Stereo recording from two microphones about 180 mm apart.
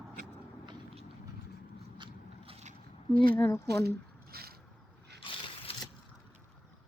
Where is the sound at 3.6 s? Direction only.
65° right (ahead or behind).